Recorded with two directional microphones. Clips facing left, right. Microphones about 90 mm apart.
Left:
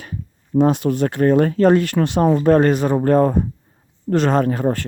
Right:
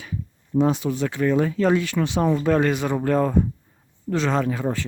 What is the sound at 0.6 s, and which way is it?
Speech, 60° left (ahead or behind).